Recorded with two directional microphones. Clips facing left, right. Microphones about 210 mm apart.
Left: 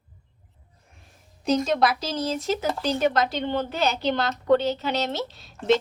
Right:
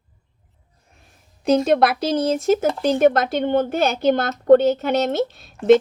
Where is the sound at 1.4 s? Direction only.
60° right (ahead or behind).